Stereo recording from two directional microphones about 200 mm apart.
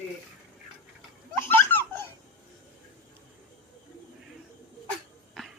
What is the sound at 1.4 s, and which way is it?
Giggle, 10° left (ahead or behind).